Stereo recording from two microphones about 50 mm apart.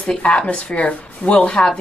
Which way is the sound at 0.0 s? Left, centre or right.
Left.